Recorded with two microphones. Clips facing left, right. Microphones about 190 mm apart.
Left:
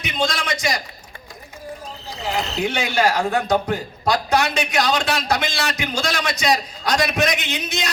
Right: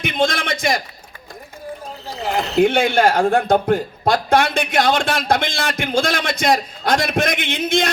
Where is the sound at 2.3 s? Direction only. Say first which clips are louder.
Right 8 dB; 55° right (ahead or behind).